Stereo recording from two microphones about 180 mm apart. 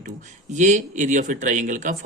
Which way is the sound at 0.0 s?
40° right (ahead or behind).